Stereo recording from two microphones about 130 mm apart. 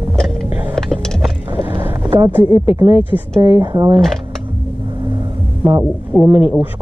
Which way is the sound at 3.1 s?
25° right (ahead or behind).